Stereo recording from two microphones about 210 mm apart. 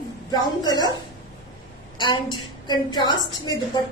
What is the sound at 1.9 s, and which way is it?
A woman's voice, 20° left (ahead or behind).